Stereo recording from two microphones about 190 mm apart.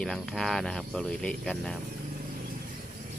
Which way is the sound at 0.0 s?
5° left (ahead or behind).